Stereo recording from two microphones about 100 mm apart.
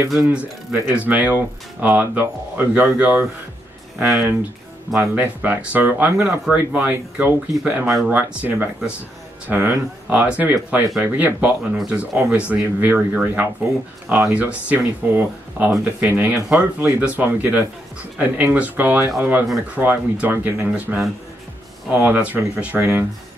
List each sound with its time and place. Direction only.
0.1 s speech: 5° right (ahead or behind)
4.9 s speech: 15° right (ahead or behind)